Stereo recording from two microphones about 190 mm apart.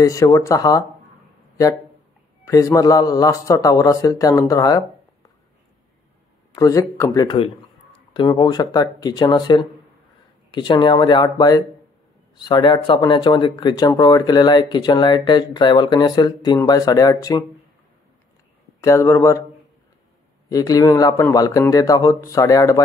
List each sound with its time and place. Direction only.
0.0 s speech: 15° left (ahead or behind)
2.4 s speech: 15° left (ahead or behind)
6.5 s speech: 20° left (ahead or behind)
18.8 s speech: 15° left (ahead or behind)
20.4 s speech: 20° left (ahead or behind)